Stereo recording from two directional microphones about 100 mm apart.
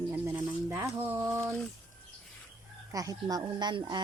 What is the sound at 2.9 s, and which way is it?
Speech, 35° right (ahead or behind).